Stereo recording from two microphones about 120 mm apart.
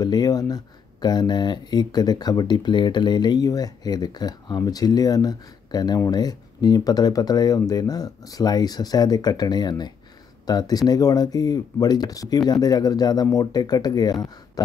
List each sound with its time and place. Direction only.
0.0 s speech: 30° left (ahead or behind)